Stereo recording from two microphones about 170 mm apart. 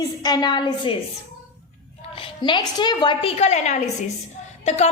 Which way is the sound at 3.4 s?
40° left (ahead or behind).